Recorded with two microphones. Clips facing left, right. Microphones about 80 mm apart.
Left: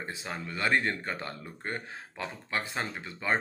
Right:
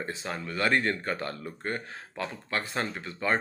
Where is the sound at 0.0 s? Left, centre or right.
Centre.